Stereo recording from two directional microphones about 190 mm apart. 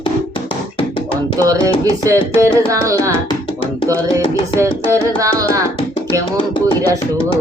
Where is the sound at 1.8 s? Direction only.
15° right (ahead or behind).